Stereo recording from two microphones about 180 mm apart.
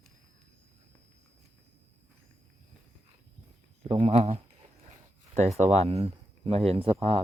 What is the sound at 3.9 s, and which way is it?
Speech, 35° right (ahead or behind).